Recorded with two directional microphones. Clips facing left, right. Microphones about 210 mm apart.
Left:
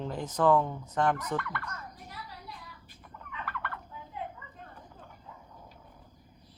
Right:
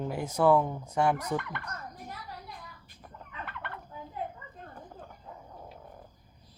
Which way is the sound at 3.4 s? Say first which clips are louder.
Left 3 dB; 25° right (ahead or behind).